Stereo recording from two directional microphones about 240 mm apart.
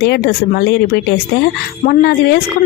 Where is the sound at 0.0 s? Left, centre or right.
Left.